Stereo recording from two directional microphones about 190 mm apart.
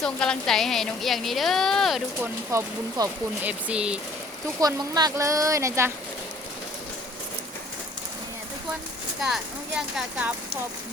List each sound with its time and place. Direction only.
0.0 s speech: 5° left (ahead or behind)
2.2 s speech: 15° right (ahead or behind)
4.6 s speech: 20° right (ahead or behind)
9.2 s speech: centre (ahead or behind)